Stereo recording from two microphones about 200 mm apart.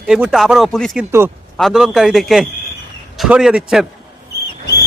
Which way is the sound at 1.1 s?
10° right (ahead or behind).